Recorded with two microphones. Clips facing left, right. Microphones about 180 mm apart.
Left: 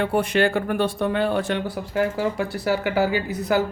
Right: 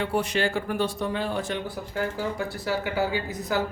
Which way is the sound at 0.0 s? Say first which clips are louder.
Left 5 dB; 55° left (ahead or behind).